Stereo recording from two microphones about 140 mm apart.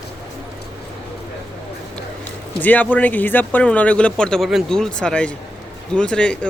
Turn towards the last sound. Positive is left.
turn(degrees=5)  # may be behind; listen again after turning